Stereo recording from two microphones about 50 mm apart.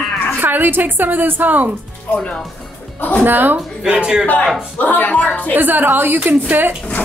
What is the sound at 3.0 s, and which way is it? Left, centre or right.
Speech, left.